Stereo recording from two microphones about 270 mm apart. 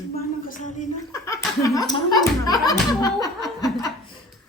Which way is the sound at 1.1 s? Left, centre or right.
Centre.